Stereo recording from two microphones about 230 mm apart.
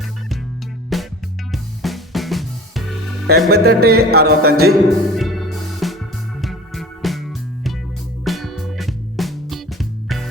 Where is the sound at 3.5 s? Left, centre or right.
Right.